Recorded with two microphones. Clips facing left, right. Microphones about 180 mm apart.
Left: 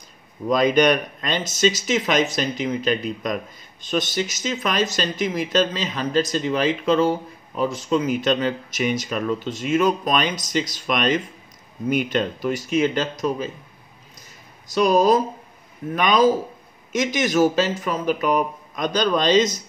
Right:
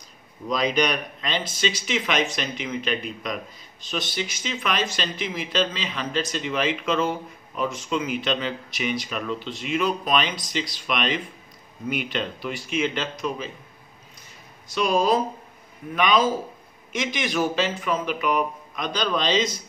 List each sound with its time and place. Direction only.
0.5 s speech: 50° left (ahead or behind)
14.7 s speech: 40° left (ahead or behind)